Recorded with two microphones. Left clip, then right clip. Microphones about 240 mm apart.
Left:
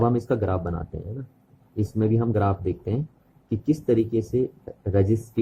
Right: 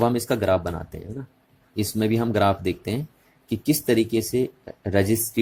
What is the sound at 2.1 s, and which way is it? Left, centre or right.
Speech, right.